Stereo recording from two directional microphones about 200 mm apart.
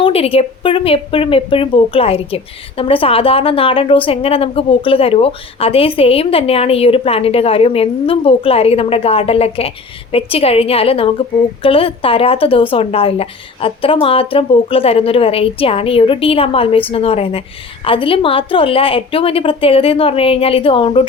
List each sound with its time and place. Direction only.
0.0 s speech: 30° left (ahead or behind)